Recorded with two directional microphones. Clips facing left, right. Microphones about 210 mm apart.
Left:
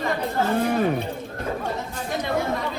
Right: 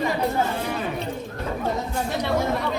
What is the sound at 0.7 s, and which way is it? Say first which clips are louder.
Speech: left 6 dB; 50° left (ahead or behind).